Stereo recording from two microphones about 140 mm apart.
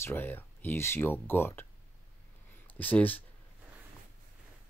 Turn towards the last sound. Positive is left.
turn(degrees=10)  # may be behind; listen again after turning